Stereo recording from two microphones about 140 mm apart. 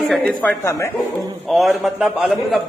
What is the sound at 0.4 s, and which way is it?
Speech, 15° left (ahead or behind).